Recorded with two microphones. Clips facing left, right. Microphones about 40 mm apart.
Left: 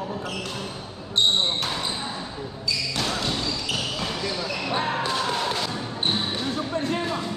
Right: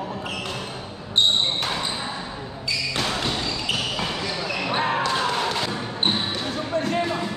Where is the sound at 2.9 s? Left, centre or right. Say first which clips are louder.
Right 2 dB; right.